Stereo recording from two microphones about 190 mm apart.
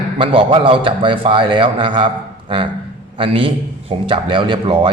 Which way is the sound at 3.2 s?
30° right (ahead or behind).